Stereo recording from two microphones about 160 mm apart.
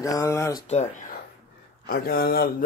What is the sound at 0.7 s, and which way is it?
Speech, 45° left (ahead or behind).